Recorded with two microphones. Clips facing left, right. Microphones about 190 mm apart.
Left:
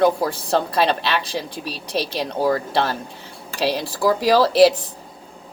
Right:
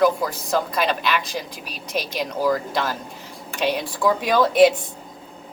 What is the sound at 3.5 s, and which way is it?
Speech, 35° left (ahead or behind).